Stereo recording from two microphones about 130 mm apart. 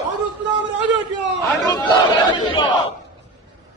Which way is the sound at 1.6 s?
30° left (ahead or behind).